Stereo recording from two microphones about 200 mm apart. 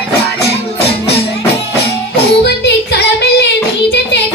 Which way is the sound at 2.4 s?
55° left (ahead or behind).